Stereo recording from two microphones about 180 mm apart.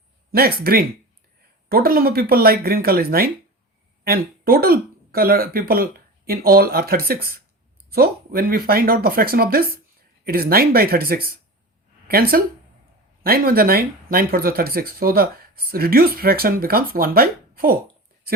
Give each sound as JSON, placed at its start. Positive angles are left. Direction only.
{"t": 0.3, "sound": "speech", "side_deg": -55}